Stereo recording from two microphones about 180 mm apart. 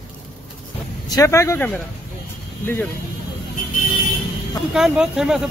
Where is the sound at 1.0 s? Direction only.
20° left (ahead or behind).